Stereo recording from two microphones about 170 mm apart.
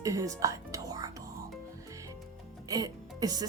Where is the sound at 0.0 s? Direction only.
20° right (ahead or behind).